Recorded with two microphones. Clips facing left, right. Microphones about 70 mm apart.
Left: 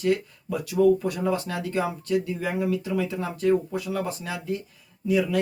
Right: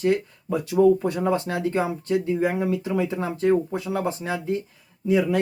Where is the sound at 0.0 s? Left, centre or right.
Right.